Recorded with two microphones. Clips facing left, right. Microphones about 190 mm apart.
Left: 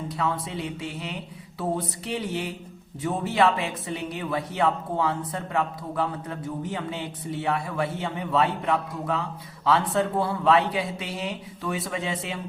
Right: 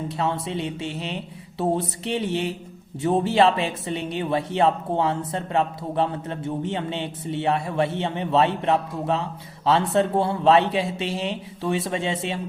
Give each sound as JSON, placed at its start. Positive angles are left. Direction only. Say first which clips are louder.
{"t": 0.1, "sound": "speech", "louder": "right 1 dB", "side_deg": -25}